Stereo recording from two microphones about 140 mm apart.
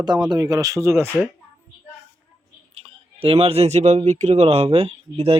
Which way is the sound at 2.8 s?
45° right (ahead or behind).